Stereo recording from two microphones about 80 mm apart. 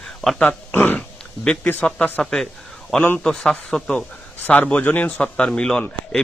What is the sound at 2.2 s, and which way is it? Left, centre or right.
A man's voice, centre.